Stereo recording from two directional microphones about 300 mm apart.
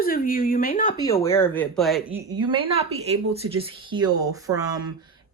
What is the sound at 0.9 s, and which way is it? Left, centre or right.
Speech, centre.